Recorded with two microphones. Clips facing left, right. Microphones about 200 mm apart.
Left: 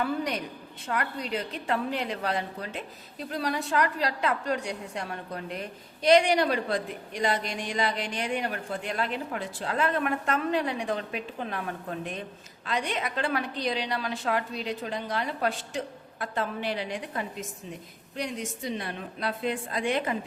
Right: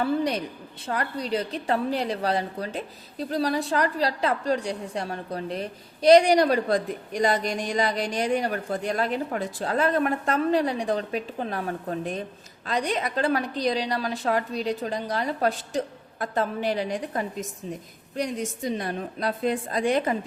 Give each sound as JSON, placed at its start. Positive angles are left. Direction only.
{"t": 0.0, "sound": "a woman's voice", "side_deg": -30}